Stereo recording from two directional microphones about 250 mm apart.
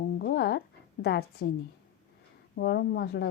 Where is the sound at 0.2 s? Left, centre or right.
Left.